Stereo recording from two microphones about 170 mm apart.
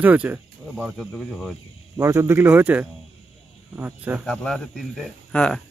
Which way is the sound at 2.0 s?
15° right (ahead or behind).